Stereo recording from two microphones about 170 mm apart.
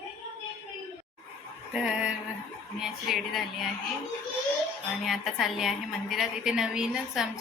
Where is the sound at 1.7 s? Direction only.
5° right (ahead or behind).